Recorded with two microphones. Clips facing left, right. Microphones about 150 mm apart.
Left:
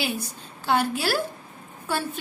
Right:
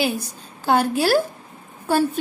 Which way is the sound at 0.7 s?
45° right (ahead or behind).